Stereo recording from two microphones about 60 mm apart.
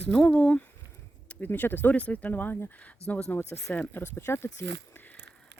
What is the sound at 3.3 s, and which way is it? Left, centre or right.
Speech, left.